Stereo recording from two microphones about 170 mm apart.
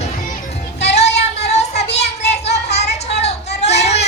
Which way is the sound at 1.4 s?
40° left (ahead or behind).